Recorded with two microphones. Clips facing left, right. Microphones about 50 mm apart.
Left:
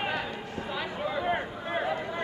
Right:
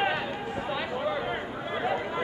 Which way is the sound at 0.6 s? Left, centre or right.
Centre.